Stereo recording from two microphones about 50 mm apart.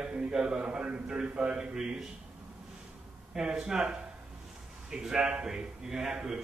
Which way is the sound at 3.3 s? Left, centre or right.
Centre.